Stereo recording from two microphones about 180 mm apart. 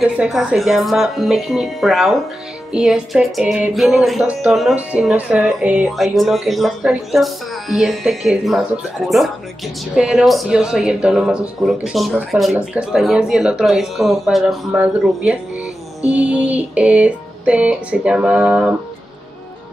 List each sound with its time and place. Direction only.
0.0 s music: 5° right (ahead or behind)
9.9 s music: 5° right (ahead or behind)